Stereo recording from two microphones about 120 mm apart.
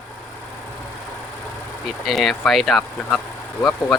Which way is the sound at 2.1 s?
Centre (ahead or behind).